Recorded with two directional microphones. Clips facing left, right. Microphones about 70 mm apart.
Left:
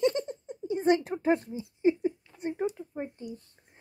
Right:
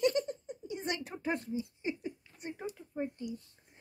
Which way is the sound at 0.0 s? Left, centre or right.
Left.